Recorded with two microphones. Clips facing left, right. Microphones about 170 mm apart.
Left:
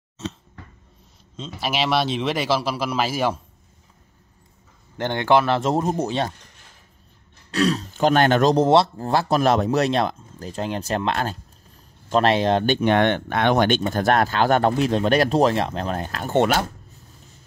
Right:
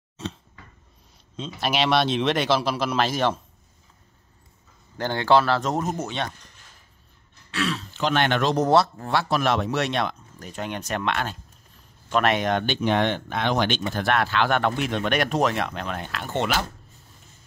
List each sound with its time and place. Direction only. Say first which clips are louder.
1.3 s speech: even; centre (ahead or behind)
4.9 s speech: left 1 dB; 20° left (ahead or behind)
7.5 s speech: left 7 dB; 40° left (ahead or behind)
8.6 s speech: left 3 dB; 30° left (ahead or behind)
12.6 s speech: left 4 dB; 55° left (ahead or behind)